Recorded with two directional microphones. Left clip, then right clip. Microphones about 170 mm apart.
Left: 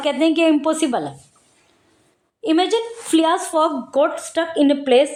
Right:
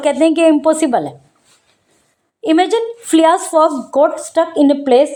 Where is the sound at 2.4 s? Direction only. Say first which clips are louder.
Right 5 dB; 25° right (ahead or behind).